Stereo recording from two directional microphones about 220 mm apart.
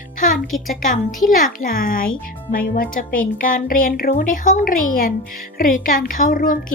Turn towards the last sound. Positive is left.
turn(degrees=40)  # may be behind; listen again after turning